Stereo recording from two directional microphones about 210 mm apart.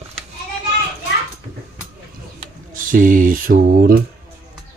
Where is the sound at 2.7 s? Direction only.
40° right (ahead or behind).